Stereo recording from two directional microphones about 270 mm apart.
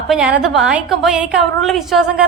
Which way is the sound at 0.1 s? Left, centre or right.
Centre.